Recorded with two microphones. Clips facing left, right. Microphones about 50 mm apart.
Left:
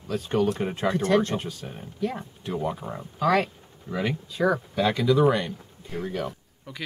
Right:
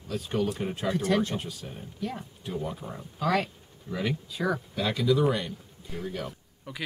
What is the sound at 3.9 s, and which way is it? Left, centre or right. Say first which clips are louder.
Speech: left 4 dB; left.